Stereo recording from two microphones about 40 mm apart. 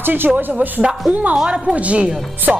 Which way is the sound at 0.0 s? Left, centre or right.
Right.